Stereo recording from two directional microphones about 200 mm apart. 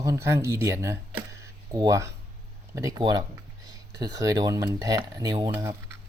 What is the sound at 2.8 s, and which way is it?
Speech, 20° right (ahead or behind).